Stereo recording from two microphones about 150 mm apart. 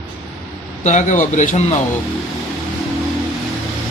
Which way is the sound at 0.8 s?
55° left (ahead or behind).